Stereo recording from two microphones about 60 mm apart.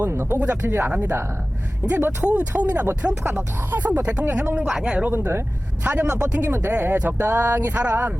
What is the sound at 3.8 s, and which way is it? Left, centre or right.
Speech, right.